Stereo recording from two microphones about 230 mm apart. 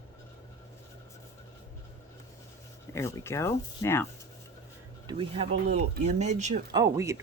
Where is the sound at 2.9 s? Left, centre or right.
Centre.